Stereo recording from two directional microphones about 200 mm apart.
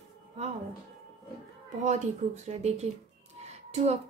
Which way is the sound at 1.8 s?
35° right (ahead or behind).